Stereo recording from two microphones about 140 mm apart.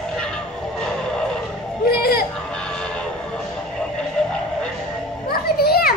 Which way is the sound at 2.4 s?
5° left (ahead or behind).